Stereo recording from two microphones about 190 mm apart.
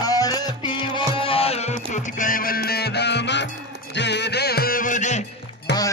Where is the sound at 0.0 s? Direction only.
20° left (ahead or behind); by 5.2 s 40° left (ahead or behind).